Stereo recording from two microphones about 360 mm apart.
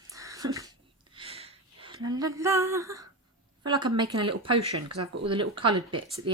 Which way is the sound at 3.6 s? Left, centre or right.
Centre.